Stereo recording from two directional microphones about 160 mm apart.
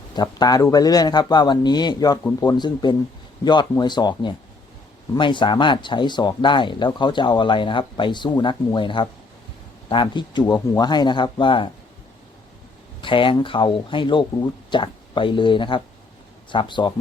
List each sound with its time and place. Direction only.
0.2 s speech: 25° left (ahead or behind)
13.0 s speech: 30° left (ahead or behind)